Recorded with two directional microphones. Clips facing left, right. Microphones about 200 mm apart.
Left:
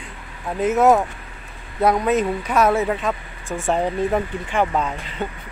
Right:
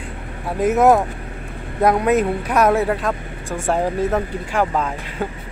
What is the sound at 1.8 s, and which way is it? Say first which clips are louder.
Speech: right 2 dB; 10° right (ahead or behind).